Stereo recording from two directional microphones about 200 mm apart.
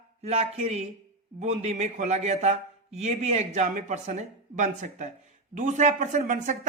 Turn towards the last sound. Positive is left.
turn(degrees=-40)  # may be behind; listen again after turning